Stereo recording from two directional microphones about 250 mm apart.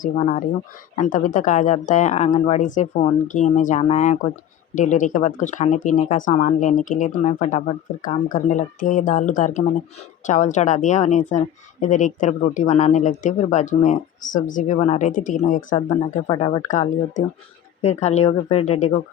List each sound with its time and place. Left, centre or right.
0.0 s a woman's voice: left